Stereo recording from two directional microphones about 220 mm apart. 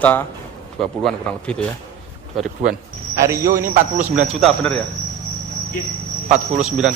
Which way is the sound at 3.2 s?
15° right (ahead or behind).